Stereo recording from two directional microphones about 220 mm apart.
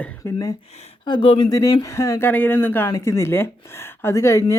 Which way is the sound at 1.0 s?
20° left (ahead or behind).